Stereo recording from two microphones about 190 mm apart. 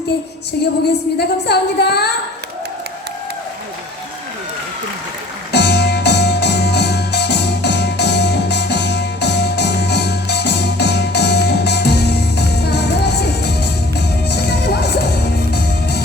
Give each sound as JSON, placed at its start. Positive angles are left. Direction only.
{"t": 1.2, "sound": "a woman's voice", "side_deg": 60}
{"t": 5.5, "sound": "music", "side_deg": 60}